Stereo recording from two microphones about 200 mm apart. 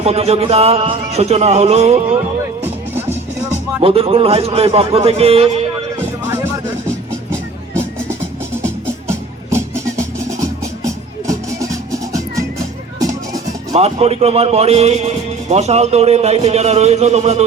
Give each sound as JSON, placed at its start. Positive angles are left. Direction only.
{"t": 0.0, "sound": "speech", "side_deg": -30}
{"t": 3.8, "sound": "a man's voice", "side_deg": -30}
{"t": 6.2, "sound": "music", "side_deg": -10}
{"t": 9.0, "sound": "music", "side_deg": -15}
{"t": 13.7, "sound": "speech", "side_deg": -30}